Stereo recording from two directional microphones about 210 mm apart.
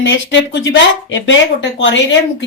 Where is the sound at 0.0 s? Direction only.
65° left (ahead or behind).